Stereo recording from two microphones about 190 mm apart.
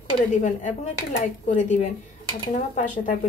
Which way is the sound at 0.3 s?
40° left (ahead or behind).